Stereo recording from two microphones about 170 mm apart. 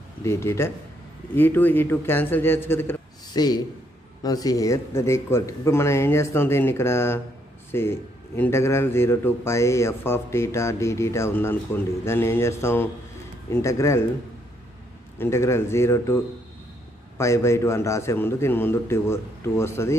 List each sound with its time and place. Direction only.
0.2 s a man's voice: 15° left (ahead or behind)
3.3 s a man's voice: 25° left (ahead or behind)
15.1 s a man's voice: 15° left (ahead or behind)
17.2 s a man's voice: 15° left (ahead or behind)